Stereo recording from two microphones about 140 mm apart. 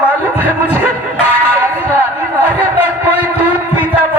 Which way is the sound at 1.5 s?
15° right (ahead or behind).